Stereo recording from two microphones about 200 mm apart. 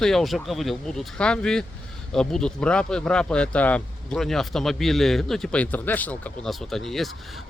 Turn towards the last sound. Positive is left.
turn(degrees=0)  # may be behind; listen again after turning